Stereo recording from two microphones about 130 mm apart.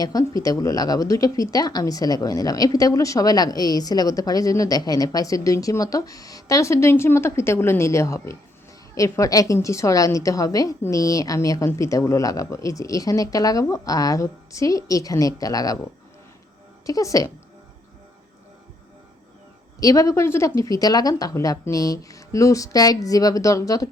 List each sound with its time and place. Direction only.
0.0 s speech: 25° left (ahead or behind)
19.8 s speech: 25° left (ahead or behind)